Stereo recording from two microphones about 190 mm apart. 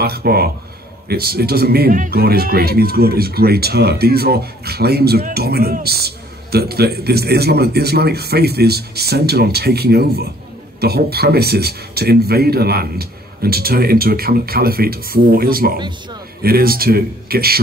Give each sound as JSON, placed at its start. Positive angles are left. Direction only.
{"t": 0.0, "sound": "speech", "side_deg": -55}